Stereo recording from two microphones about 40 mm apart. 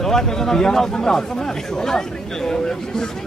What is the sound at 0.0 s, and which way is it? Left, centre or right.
Speech, centre.